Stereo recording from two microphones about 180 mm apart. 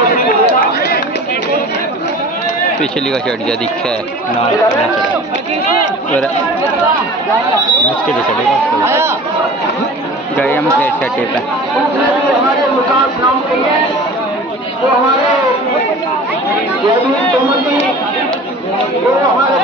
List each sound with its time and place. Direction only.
0.1 s chatter: 55° left (ahead or behind)
2.8 s speech: 5° left (ahead or behind)
8.8 s speech: 15° right (ahead or behind)
10.3 s speech: 10° left (ahead or behind)